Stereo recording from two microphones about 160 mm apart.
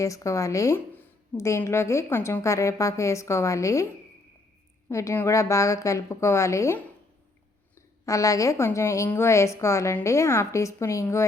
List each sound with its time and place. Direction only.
0.0 s a woman's voice: 20° left (ahead or behind)
4.9 s a woman's voice: 20° left (ahead or behind)